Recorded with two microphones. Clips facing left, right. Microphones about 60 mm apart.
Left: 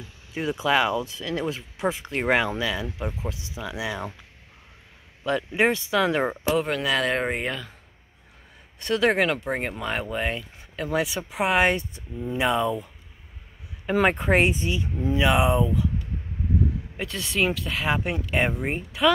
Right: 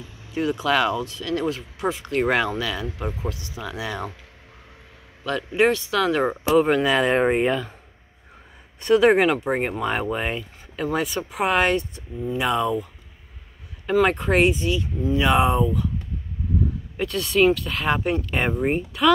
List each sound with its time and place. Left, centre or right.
0.3 s speech: centre
5.2 s speech: centre
6.6 s speech: centre
8.8 s speech: right
9.5 s speech: centre
14.0 s speech: centre
15.1 s speech: centre
16.9 s speech: centre